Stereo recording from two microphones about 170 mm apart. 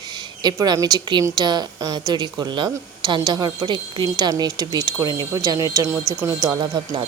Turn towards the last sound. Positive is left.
turn(degrees=-25)  # may be behind; listen again after turning